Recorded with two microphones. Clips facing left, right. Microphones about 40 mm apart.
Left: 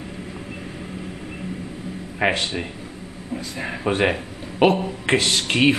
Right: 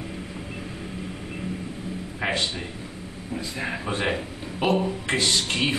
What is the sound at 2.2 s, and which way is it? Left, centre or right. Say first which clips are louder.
Speech: left 6 dB; left.